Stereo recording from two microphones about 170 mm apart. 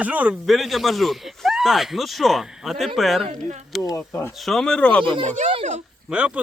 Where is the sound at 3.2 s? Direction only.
40° right (ahead or behind).